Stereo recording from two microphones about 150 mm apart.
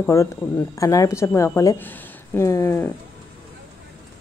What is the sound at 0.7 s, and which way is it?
A woman's voice, 20° left (ahead or behind).